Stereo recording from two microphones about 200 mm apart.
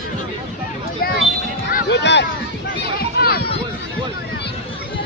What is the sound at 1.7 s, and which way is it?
Music, 50° left (ahead or behind).